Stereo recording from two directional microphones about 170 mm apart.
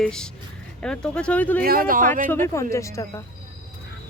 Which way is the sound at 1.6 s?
55° right (ahead or behind).